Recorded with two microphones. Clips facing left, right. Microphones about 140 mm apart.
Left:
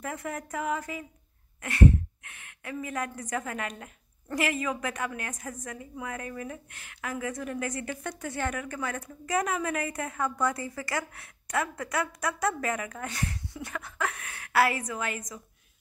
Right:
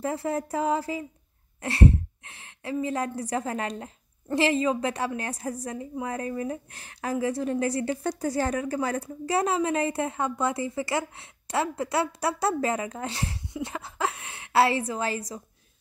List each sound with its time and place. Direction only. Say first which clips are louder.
0.0 s a woman's voice: right 7 dB; 30° right (ahead or behind)